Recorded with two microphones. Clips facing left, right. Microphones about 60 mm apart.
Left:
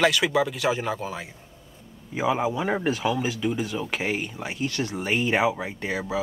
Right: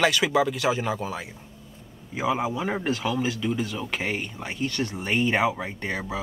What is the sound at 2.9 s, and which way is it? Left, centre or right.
Speech, centre.